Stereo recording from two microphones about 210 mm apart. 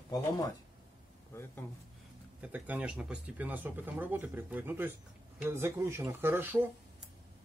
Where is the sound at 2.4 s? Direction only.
5° right (ahead or behind).